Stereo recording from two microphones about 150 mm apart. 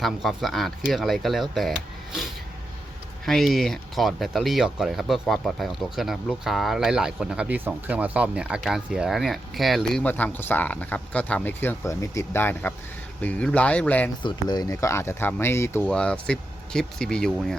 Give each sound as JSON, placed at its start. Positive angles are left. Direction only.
{"t": 0.0, "sound": "speech", "side_deg": 0}
{"t": 14.2, "sound": "speech", "side_deg": 30}
{"t": 15.9, "sound": "speech", "side_deg": 5}